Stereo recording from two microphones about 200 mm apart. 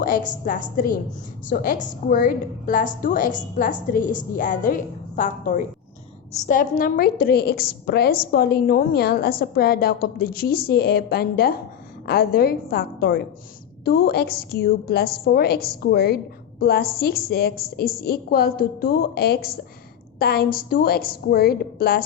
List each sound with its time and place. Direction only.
0.0 s a woman's voice: 40° left (ahead or behind)